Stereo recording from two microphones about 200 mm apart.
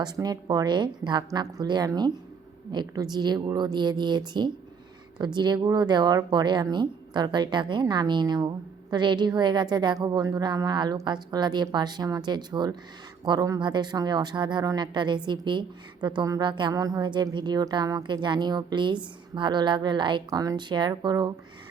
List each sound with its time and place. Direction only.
0.0 s speech: 20° right (ahead or behind)